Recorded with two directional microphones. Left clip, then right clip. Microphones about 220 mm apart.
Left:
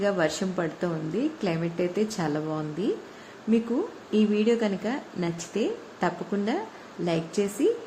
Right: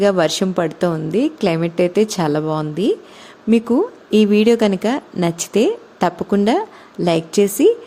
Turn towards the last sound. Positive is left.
turn(degrees=-50)  # may be behind; listen again after turning